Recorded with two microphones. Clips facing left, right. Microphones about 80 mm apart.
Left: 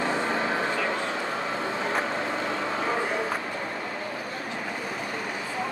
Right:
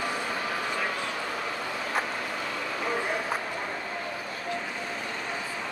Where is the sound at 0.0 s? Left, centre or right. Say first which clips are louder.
Left 5 dB; left.